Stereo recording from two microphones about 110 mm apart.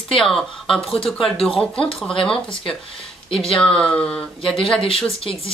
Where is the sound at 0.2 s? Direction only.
5° left (ahead or behind).